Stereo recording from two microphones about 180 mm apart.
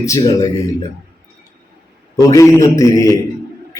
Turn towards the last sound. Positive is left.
turn(degrees=20)  # may be behind; listen again after turning